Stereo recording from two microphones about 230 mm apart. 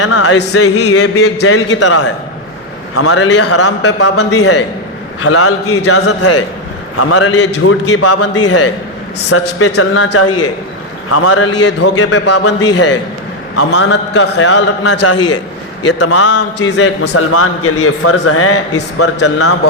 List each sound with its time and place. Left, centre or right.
0.0 s a sound: left
0.5 s a man's voice: left
9.1 s a man's voice: left
11.8 s a man's voice: left
13.6 s a man's voice: left
14.3 s a man's voice: left
15.0 s a sound: left
16.0 s a man's voice: left